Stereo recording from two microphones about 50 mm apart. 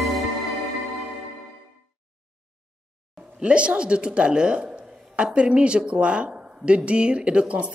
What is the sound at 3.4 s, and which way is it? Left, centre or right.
Speech, right.